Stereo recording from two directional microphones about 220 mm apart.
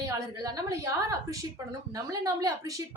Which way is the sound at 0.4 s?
15° right (ahead or behind).